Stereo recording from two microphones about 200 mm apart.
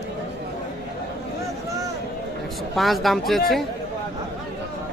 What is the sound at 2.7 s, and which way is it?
Speech, centre (ahead or behind).